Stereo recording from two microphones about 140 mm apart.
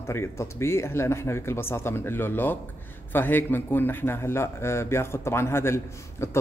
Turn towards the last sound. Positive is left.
turn(degrees=20)  # may be behind; listen again after turning